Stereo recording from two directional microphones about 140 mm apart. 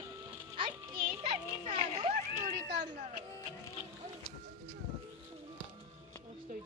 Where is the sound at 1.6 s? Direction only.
50° right (ahead or behind).